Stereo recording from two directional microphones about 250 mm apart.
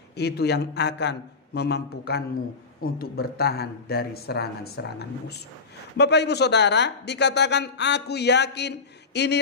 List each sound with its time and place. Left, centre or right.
0.1 s speech: left